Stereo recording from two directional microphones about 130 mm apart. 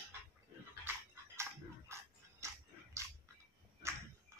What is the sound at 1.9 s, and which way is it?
Dog, 20° right (ahead or behind).